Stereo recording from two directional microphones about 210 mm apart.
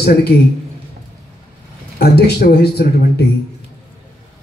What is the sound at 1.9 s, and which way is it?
Speech, 50° left (ahead or behind).